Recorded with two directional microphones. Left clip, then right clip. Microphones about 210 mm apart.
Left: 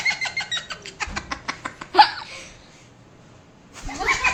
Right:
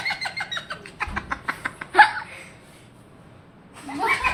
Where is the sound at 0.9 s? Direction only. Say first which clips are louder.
Right 1 dB; 15° left (ahead or behind).